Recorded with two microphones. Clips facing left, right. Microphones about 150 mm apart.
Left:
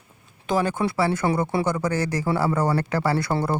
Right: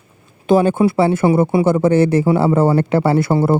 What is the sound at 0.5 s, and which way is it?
Speech, 25° right (ahead or behind).